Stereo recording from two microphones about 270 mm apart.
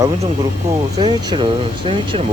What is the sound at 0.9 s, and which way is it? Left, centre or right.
Speech, centre.